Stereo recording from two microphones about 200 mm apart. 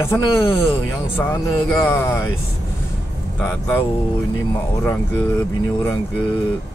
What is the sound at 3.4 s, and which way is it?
Speech, 10° left (ahead or behind).